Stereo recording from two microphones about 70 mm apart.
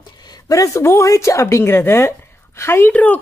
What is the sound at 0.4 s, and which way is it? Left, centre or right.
Speech, left.